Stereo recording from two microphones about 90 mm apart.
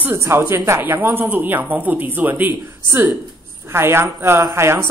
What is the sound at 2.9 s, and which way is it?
Speech, 35° right (ahead or behind).